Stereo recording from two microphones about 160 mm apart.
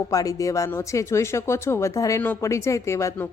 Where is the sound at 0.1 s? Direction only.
20° left (ahead or behind).